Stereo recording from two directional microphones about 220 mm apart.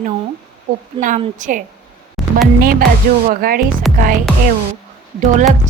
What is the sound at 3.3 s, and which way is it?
Speech, 40° right (ahead or behind).